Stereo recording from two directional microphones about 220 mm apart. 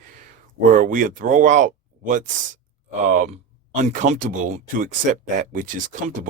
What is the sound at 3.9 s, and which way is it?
Speech, 35° right (ahead or behind).